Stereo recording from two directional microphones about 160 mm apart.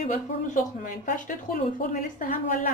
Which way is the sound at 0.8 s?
55° left (ahead or behind).